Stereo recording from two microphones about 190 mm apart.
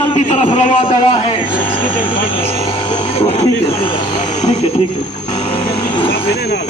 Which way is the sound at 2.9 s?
30° left (ahead or behind).